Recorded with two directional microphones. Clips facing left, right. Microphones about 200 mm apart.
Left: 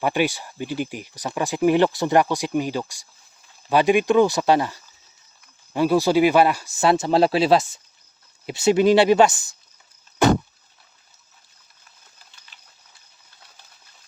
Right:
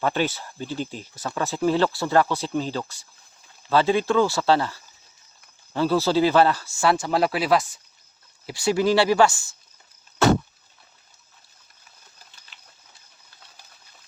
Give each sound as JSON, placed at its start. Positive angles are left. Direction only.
{"t": 0.0, "sound": "speech", "side_deg": 15}